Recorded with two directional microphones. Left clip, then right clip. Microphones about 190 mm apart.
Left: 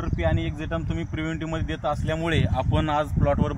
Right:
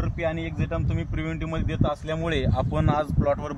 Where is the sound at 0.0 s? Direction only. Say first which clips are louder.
Left 1 dB; 20° right (ahead or behind).